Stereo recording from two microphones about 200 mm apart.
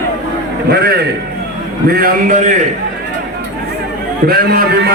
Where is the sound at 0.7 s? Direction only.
50° right (ahead or behind).